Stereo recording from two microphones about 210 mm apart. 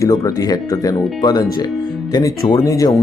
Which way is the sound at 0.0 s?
15° left (ahead or behind).